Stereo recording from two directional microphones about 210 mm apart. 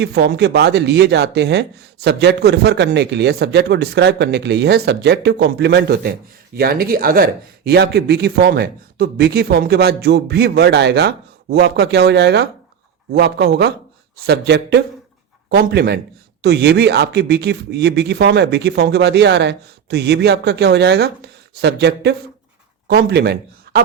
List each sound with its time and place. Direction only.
0.0 s speech: 50° right (ahead or behind)